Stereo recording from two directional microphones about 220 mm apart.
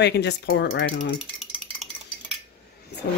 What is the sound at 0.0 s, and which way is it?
Speech, 50° left (ahead or behind).